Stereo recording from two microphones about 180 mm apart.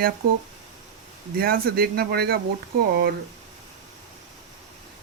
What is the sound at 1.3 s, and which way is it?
Speech, 55° right (ahead or behind).